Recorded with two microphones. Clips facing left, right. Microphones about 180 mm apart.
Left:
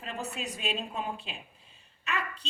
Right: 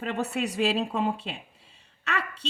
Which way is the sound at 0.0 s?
80° right.